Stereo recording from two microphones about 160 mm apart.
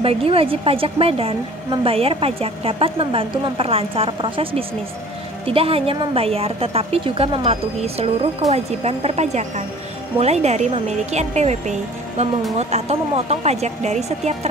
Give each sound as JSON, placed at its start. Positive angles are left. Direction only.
{"t": 0.0, "sound": "a woman's voice", "side_deg": -35}